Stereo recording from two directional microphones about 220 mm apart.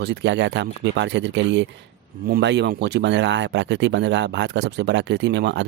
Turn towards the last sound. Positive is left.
turn(degrees=-55)  # may be behind; listen again after turning